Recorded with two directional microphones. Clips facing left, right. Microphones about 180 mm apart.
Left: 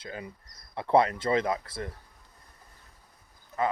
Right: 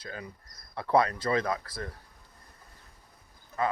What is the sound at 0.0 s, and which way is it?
Speech, 25° left (ahead or behind).